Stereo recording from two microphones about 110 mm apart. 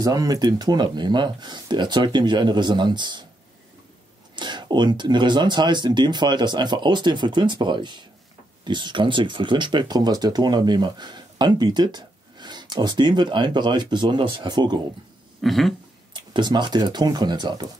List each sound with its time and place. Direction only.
0.0 s speech: 35° right (ahead or behind)
4.4 s speech: 45° right (ahead or behind)
15.4 s a sound: centre (ahead or behind)
16.1 s speech: 45° right (ahead or behind)